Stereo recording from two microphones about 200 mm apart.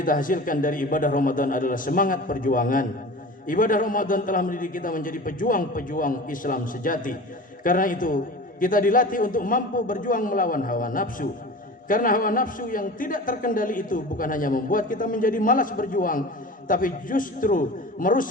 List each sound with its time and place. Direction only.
0.0 s a man's voice: 45° left (ahead or behind)